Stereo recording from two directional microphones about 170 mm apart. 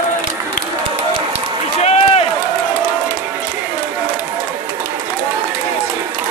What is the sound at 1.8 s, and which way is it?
Run, 35° left (ahead or behind).